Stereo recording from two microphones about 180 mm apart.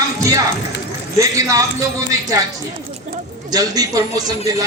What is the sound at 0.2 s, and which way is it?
A man's voice, 20° right (ahead or behind).